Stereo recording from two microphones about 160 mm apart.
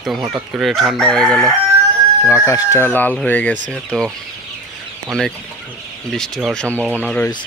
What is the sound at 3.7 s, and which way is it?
Chicken, 5° left (ahead or behind).